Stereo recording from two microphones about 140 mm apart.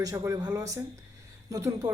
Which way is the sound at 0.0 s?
25° right (ahead or behind).